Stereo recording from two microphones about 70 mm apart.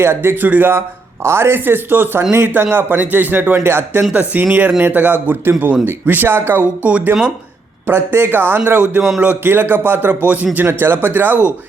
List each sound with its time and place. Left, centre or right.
0.0 s speech: right
4.1 s speech: right
7.9 s speech: right
9.0 s speech: centre
9.4 s speech: right
10.7 s speech: right